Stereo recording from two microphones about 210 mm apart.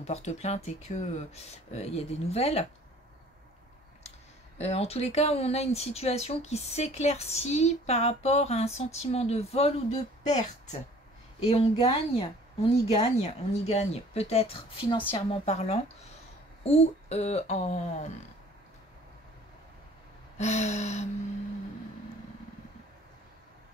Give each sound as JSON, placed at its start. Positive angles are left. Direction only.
{"t": 0.0, "sound": "speech", "side_deg": 30}
{"t": 4.6, "sound": "speech", "side_deg": 30}
{"t": 11.8, "sound": "a woman's voice", "side_deg": 25}
{"t": 20.3, "sound": "speech", "side_deg": 35}